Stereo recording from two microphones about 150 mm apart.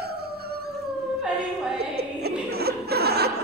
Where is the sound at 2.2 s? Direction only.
90° right.